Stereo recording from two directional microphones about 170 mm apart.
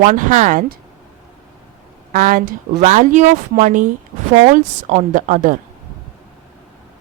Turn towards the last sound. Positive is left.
turn(degrees=-50)  # may be behind; listen again after turning